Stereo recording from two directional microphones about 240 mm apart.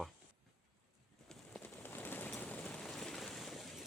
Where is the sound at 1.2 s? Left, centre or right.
Centre.